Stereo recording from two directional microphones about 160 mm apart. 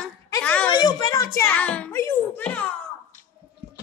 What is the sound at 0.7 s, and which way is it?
A child's voice, 25° left (ahead or behind).